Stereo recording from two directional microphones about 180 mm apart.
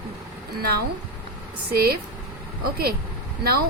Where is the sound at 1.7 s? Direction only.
60° right (ahead or behind).